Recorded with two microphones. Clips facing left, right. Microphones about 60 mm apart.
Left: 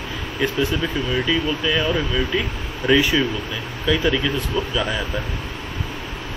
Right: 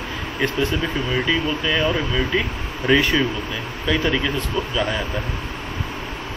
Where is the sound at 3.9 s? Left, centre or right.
Centre.